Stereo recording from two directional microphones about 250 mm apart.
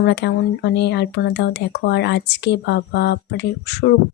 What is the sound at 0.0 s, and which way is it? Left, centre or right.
Speech, left.